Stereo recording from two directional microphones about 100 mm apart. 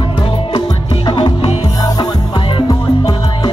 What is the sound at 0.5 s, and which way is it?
Music, 55° left (ahead or behind).